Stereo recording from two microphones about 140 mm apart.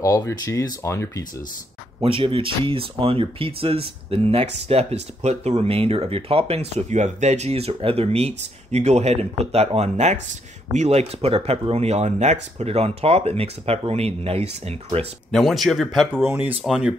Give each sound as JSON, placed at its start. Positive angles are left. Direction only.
{"t": 0.2, "sound": "speech", "side_deg": 20}
{"t": 2.0, "sound": "speech", "side_deg": -40}
{"t": 15.3, "sound": "speech", "side_deg": 0}
{"t": 16.2, "sound": "speech", "side_deg": -15}